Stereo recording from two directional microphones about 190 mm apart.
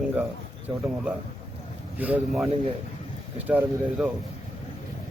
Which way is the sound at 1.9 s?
10° right (ahead or behind).